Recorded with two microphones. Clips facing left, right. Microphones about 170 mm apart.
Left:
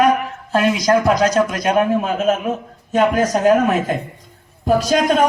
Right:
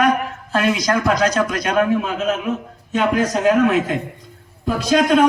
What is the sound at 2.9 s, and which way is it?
A man's voice, 45° left (ahead or behind).